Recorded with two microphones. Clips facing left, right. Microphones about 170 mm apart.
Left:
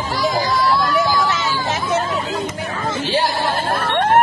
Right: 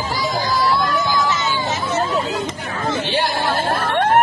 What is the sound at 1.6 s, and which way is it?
Hubbub, 55° left (ahead or behind).